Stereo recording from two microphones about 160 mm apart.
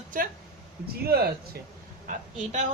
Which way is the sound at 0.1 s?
60° right (ahead or behind).